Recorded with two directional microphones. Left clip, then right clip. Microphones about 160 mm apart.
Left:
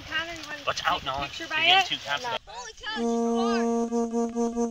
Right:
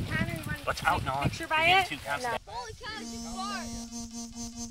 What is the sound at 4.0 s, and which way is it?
Music, 20° right (ahead or behind).